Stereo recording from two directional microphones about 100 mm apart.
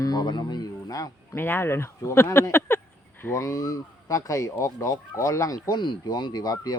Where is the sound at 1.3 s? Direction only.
20° left (ahead or behind); by 6.8 s 40° left (ahead or behind).